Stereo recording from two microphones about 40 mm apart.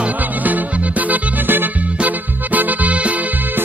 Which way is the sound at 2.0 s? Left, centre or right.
Right.